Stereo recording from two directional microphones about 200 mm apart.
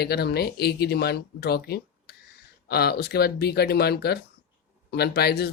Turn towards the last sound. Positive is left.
turn(degrees=55)  # may be behind; listen again after turning